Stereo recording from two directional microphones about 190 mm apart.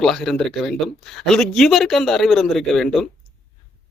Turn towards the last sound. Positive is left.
turn(degrees=0)  # may be behind; listen again after turning